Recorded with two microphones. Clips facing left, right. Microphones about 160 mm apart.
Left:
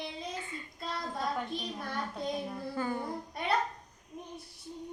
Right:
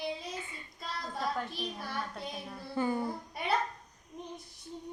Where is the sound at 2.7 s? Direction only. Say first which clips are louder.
Right 4 dB; 20° right (ahead or behind).